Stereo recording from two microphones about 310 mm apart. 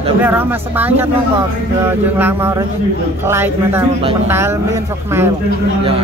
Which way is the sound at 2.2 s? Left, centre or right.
Centre.